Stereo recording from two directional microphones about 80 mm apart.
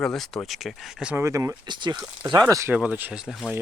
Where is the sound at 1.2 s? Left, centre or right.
Right.